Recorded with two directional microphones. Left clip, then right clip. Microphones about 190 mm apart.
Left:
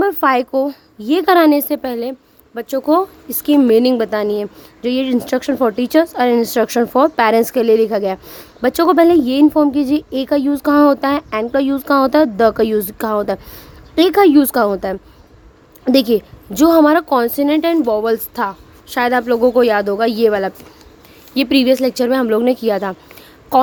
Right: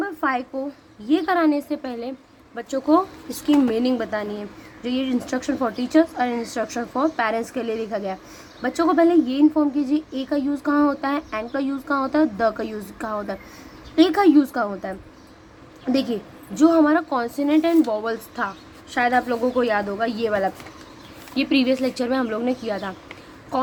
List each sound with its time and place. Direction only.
0.0 s a woman's voice: 55° left (ahead or behind)